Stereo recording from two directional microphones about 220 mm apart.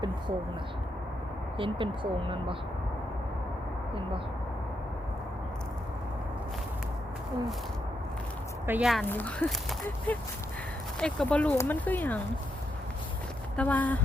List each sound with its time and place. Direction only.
1.5 s speech: 25° right (ahead or behind)
8.6 s speech: 5° right (ahead or behind)
13.6 s speech: 5° left (ahead or behind)